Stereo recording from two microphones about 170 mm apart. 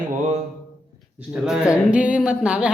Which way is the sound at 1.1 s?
5° right (ahead or behind).